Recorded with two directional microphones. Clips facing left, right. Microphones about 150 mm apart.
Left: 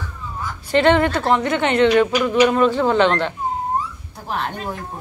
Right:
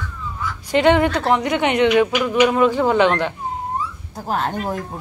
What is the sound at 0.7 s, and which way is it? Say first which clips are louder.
A woman's voice: even; 10° right (ahead or behind).